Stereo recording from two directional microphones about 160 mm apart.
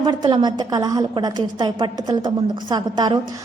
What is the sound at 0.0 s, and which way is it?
A woman's voice, 30° right (ahead or behind).